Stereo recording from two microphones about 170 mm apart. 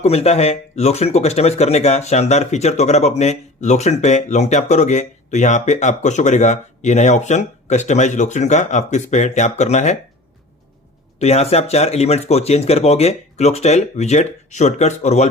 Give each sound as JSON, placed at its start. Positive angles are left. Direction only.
{"t": 0.0, "sound": "speech", "side_deg": 35}
{"t": 11.2, "sound": "speech", "side_deg": 40}